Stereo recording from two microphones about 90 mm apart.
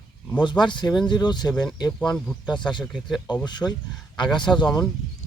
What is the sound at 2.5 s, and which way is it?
Speech, 55° left (ahead or behind).